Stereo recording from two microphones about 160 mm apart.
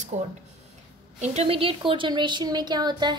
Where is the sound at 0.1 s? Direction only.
50° right (ahead or behind).